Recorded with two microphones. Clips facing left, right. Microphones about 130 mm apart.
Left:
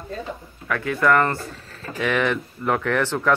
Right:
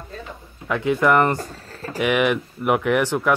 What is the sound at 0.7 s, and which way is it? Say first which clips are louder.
Speech: right 2 dB; 20° right (ahead or behind).